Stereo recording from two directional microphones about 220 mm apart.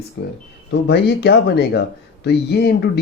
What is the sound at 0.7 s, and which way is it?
Speech, 50° left (ahead or behind).